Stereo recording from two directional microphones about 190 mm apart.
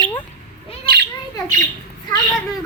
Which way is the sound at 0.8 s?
55° right (ahead or behind).